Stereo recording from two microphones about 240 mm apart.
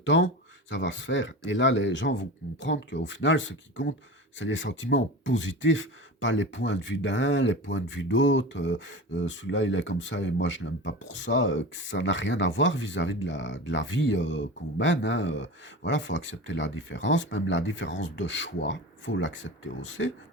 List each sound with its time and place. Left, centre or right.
0.0 s speech: left